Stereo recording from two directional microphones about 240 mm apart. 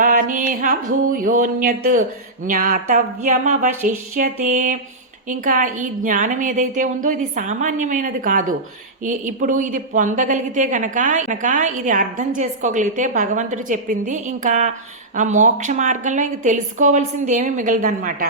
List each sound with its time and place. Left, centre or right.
0.0 s a woman's voice: right